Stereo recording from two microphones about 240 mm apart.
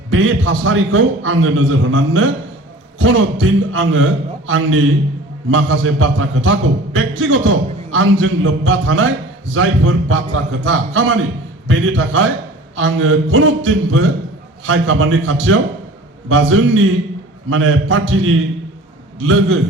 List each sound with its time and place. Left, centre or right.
0.1 s a man's voice: right